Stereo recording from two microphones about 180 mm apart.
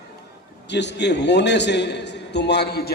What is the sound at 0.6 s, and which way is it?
A man's voice, 75° left (ahead or behind).